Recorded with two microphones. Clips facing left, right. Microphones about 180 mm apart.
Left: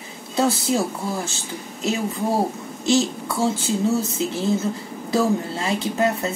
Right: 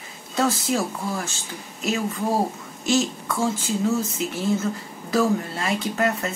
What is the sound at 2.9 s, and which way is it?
Speech, 30° left (ahead or behind).